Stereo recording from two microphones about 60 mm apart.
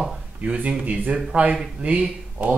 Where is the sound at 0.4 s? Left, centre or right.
Centre.